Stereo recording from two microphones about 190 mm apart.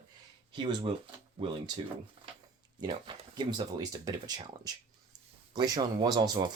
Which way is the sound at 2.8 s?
25° right (ahead or behind).